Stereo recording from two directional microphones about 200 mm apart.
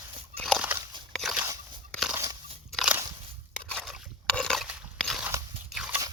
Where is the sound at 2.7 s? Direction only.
Centre (ahead or behind).